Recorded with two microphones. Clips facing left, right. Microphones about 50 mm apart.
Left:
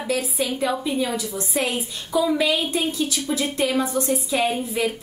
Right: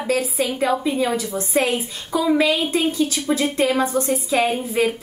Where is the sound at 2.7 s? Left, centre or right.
Right.